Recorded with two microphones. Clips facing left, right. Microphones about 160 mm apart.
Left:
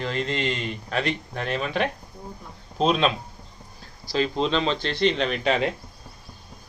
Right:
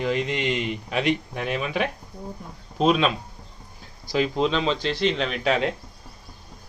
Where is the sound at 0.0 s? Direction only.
10° right (ahead or behind).